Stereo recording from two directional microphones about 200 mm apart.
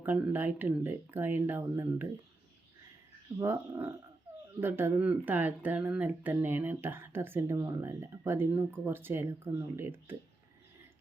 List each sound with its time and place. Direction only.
0.0 s speech: 10° right (ahead or behind)
3.3 s speech: 15° right (ahead or behind)